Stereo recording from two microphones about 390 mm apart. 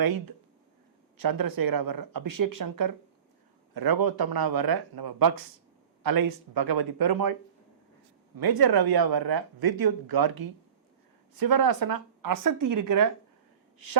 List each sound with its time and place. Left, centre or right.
1.2 s speech: right
8.4 s speech: right